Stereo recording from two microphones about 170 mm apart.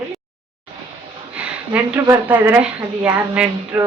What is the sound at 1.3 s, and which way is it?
Speech, 10° right (ahead or behind).